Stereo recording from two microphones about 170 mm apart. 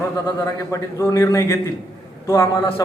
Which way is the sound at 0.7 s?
15° left (ahead or behind).